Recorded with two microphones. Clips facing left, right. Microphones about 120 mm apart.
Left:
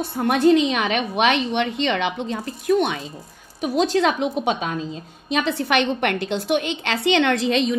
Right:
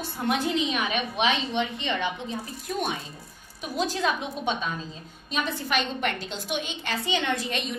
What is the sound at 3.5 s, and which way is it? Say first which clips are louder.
A woman's voice: left 9 dB; 70° left (ahead or behind).